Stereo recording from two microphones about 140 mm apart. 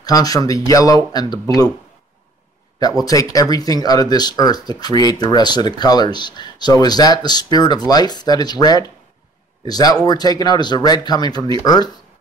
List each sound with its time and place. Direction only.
0.0 s speech: 25° left (ahead or behind)
3.1 s speech: 25° left (ahead or behind)